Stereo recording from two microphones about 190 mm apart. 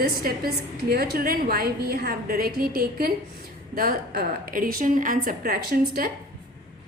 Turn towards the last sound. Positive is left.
turn(degrees=-50)  # may be behind; listen again after turning